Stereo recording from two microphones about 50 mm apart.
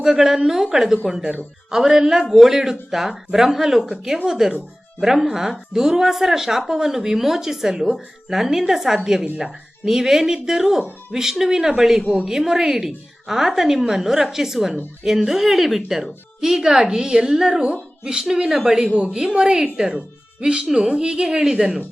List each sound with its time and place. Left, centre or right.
0.0 s speech: centre